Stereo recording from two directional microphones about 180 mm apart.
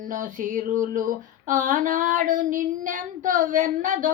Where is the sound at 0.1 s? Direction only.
45° right (ahead or behind).